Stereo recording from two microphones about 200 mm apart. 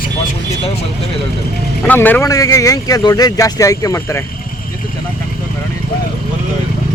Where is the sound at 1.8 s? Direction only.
10° left (ahead or behind).